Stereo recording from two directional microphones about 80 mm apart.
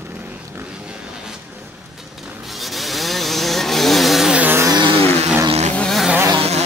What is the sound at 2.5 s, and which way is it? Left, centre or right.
Chainsaw, centre.